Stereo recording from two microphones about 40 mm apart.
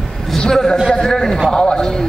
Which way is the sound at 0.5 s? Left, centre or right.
Centre.